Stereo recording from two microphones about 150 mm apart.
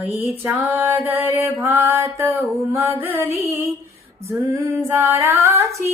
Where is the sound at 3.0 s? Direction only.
15° right (ahead or behind).